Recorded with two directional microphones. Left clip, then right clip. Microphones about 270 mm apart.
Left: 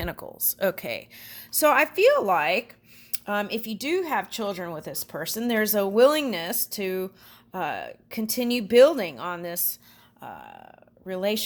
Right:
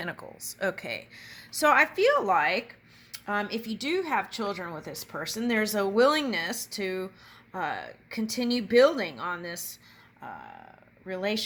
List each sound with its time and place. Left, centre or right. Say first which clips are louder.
0.0 s speech: left 3 dB; left